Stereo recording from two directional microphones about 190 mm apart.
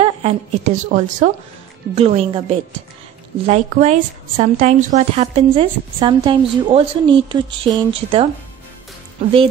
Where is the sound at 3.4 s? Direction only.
40° right (ahead or behind).